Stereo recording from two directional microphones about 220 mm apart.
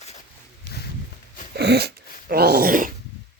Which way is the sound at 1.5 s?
50° right (ahead or behind).